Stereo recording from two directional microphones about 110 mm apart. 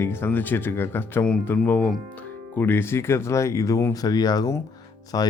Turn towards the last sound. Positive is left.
turn(degrees=40)  # may be behind; listen again after turning